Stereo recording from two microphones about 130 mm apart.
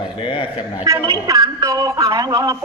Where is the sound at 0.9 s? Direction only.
25° right (ahead or behind).